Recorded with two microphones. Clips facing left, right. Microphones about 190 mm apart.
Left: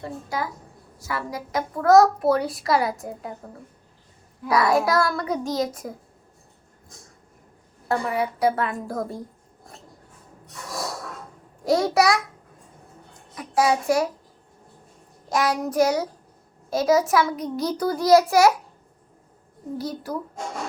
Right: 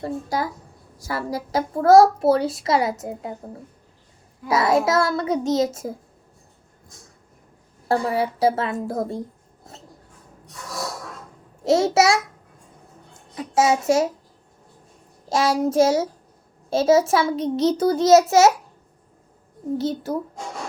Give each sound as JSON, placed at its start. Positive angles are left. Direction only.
{"t": 0.0, "sound": "a woman's voice", "side_deg": -35}
{"t": 7.9, "sound": "a child's voice", "side_deg": -30}
{"t": 11.6, "sound": "a child's voice", "side_deg": -25}
{"t": 15.3, "sound": "a child's voice", "side_deg": -25}
{"t": 19.8, "sound": "a child's voice", "side_deg": -25}